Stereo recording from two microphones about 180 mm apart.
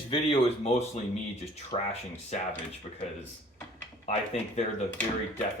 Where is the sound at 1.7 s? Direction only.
40° left (ahead or behind).